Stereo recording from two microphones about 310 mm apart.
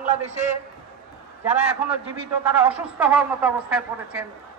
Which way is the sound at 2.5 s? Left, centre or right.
Centre.